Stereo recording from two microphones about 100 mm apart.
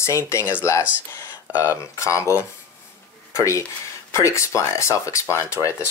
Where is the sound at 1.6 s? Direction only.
30° left (ahead or behind).